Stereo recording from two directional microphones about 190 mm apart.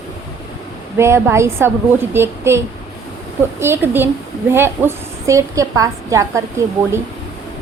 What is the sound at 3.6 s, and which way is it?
A woman's voice, 10° right (ahead or behind).